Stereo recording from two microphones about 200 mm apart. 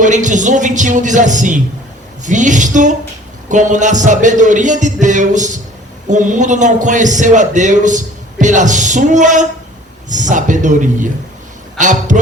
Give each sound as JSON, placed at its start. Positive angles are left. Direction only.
{"t": 0.0, "sound": "a man's voice", "side_deg": -40}